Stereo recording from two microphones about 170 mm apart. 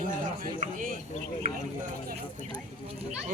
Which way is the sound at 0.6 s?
55° right (ahead or behind).